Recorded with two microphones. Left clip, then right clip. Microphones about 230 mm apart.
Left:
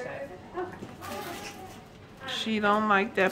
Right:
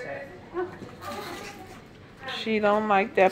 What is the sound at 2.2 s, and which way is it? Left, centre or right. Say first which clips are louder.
Speech: right 3 dB; centre.